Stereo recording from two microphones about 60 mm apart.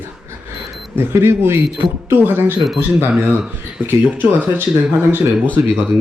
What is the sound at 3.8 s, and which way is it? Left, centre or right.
Speech, right.